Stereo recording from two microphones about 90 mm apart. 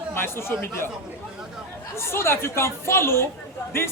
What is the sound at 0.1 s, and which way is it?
Speech, 25° left (ahead or behind).